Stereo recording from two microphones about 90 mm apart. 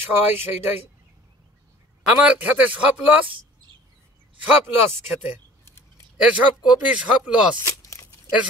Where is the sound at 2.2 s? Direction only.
15° right (ahead or behind).